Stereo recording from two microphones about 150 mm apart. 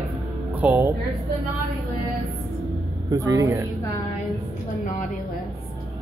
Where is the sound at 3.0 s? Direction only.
20° right (ahead or behind).